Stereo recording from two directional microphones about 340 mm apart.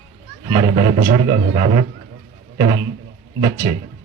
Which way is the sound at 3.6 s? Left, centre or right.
Centre.